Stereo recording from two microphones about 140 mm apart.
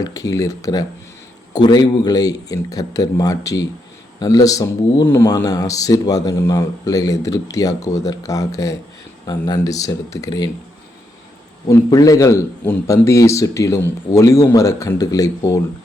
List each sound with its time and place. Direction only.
0.0 s speech: 25° left (ahead or behind)
11.7 s speech: 25° left (ahead or behind)